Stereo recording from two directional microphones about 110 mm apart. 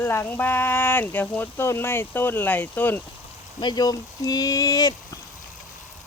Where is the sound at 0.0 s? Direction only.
20° left (ahead or behind).